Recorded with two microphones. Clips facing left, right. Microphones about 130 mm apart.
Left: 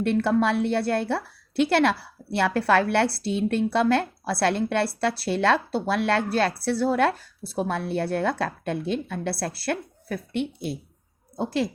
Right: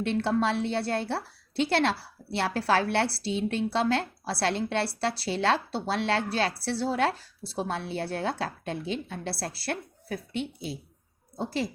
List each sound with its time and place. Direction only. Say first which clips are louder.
0.0 s a woman's voice: left 4 dB; 55° left (ahead or behind)